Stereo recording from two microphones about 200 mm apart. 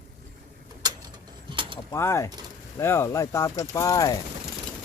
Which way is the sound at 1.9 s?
15° left (ahead or behind).